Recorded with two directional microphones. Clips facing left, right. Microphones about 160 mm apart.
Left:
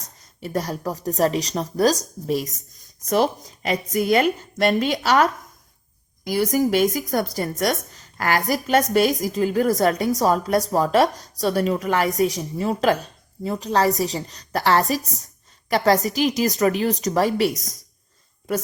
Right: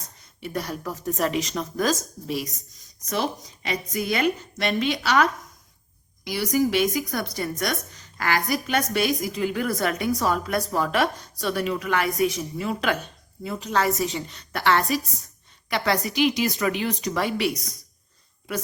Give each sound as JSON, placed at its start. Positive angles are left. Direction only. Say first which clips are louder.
{"t": 0.2, "sound": "a woman's voice", "louder": "left 4 dB", "side_deg": 40}
{"t": 3.7, "sound": "a woman's voice", "louder": "left 7 dB", "side_deg": 40}